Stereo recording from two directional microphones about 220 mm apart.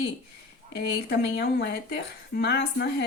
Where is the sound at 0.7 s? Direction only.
50° left (ahead or behind).